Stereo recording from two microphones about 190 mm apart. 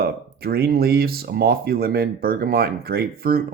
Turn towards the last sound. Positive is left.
turn(degrees=-50)  # may be behind; listen again after turning